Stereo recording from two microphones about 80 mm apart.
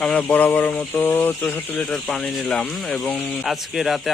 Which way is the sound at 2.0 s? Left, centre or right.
Centre.